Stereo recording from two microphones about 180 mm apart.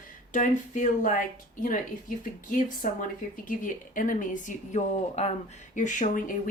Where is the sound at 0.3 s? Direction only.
45° left (ahead or behind).